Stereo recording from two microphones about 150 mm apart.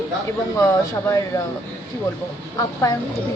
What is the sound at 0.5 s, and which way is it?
Speech, 20° left (ahead or behind).